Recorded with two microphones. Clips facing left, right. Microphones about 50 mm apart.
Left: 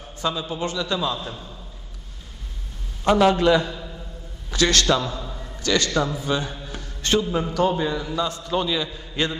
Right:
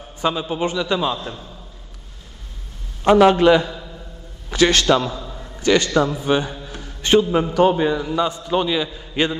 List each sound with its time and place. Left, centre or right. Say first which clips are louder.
0.2 s a man's voice: right 5 dB; right
3.3 s a man's voice: right 4 dB; right
3.6 s a sound: right 1 dB; centre
4.5 s a man's voice: right 4 dB; right
5.2 s a sound: right 1 dB; centre
5.6 s a man's voice: right 5 dB; right
6.7 s mantra: right 6 dB; centre
7.5 s a man's voice: right 6 dB; right
9.1 s a man's voice: right 5 dB; right